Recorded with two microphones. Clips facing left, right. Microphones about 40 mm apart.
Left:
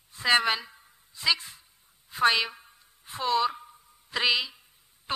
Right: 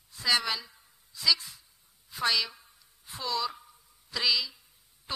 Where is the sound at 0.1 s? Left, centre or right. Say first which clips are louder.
Left 5 dB; left.